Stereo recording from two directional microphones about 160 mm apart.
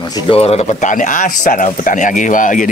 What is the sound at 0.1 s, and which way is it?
A man's voice, 35° left (ahead or behind).